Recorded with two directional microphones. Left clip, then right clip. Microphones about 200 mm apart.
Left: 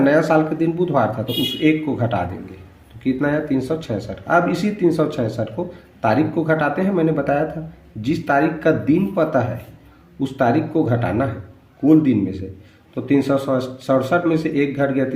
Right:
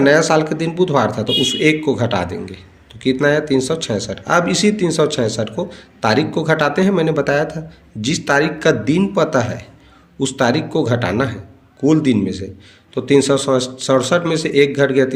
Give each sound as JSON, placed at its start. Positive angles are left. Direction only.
{"t": 0.0, "sound": "speech", "side_deg": -35}